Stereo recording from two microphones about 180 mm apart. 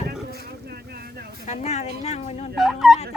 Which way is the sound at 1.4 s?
40° left (ahead or behind).